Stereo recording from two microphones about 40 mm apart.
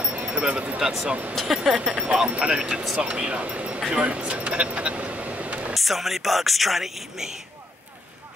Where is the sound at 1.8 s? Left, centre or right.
Right.